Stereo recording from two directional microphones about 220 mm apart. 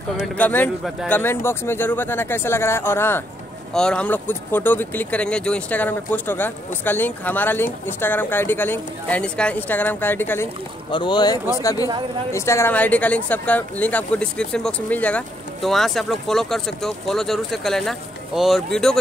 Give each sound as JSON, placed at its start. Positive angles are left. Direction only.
{"t": 0.4, "sound": "speech", "side_deg": 10}
{"t": 10.9, "sound": "speech", "side_deg": 20}